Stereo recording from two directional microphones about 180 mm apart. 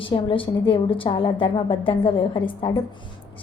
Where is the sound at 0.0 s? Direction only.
30° left (ahead or behind).